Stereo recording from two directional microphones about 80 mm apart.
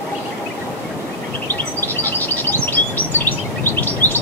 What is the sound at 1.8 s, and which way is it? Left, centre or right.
Bird, left.